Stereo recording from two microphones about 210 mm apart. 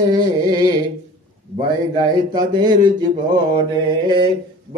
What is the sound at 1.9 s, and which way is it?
Music, 20° right (ahead or behind).